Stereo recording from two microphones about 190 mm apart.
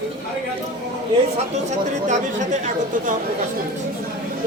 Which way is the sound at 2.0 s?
40° right (ahead or behind).